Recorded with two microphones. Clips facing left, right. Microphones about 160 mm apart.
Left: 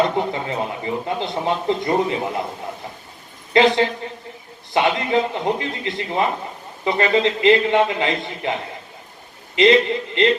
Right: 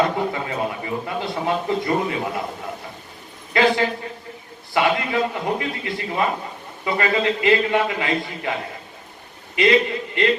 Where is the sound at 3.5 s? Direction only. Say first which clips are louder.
Left 3 dB; 25° left (ahead or behind).